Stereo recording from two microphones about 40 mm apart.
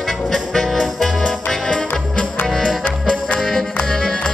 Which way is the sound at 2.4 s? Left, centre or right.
Centre.